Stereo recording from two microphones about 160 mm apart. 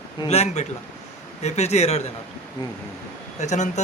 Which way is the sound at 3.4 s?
45° left (ahead or behind).